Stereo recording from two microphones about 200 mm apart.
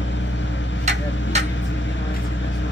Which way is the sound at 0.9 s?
35° right (ahead or behind).